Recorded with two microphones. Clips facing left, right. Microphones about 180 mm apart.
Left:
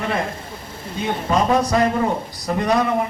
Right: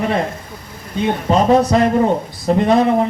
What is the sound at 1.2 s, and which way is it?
A man's voice, 25° right (ahead or behind).